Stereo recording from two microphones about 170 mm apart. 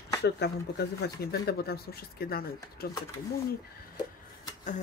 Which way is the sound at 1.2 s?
65° left (ahead or behind).